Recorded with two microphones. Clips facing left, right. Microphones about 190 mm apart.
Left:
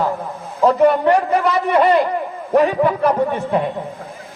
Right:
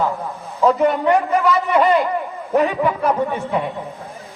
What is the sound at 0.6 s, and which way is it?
A man's voice, 35° left (ahead or behind).